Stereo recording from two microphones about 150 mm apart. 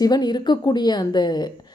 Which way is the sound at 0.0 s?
25° left (ahead or behind).